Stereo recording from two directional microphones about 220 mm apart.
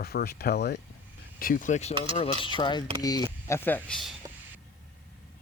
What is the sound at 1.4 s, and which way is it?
Speech, 40° left (ahead or behind).